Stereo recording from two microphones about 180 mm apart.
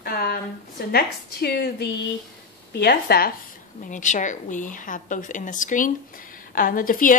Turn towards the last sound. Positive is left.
turn(degrees=50)  # may be behind; listen again after turning